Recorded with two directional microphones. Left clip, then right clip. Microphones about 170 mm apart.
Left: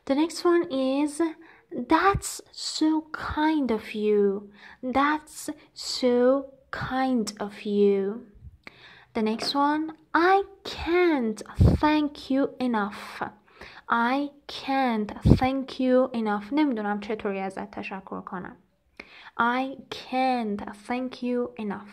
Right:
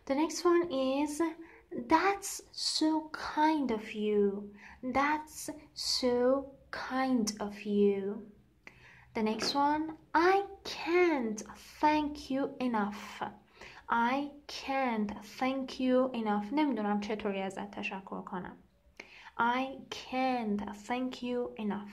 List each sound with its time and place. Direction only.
0.0 s speech: 30° left (ahead or behind)
8.6 s a sound: 30° left (ahead or behind)
9.6 s speech: 25° left (ahead or behind)